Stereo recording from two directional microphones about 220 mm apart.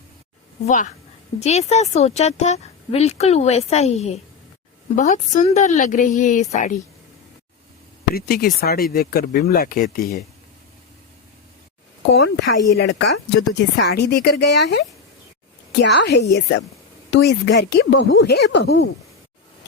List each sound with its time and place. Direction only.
0.6 s speech: 35° left (ahead or behind)
8.1 s speech: 45° left (ahead or behind)
12.1 s speech: 50° left (ahead or behind)